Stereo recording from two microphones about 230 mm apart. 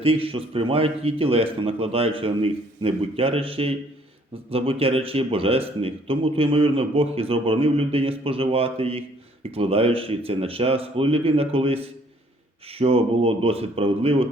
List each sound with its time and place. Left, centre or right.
0.0 s a man's voice: right